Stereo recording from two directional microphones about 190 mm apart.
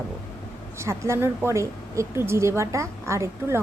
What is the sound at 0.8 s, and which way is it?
A woman's voice, 15° right (ahead or behind).